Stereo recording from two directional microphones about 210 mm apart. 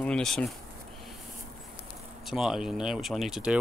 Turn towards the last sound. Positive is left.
turn(degrees=-5)  # may be behind; listen again after turning